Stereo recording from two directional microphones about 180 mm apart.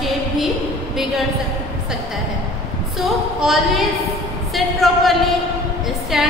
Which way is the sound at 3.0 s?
Centre (ahead or behind).